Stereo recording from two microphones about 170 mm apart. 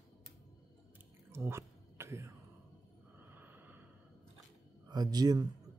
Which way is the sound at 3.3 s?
10° right (ahead or behind).